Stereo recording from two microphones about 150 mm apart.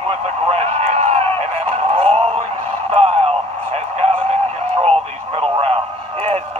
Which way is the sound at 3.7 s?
45° right (ahead or behind).